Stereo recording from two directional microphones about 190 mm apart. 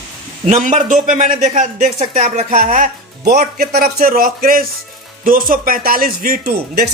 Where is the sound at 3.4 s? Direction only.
55° right (ahead or behind).